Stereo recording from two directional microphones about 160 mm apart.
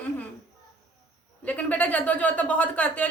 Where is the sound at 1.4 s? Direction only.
10° left (ahead or behind).